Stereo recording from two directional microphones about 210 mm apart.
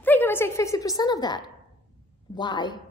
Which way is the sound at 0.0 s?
10° left (ahead or behind).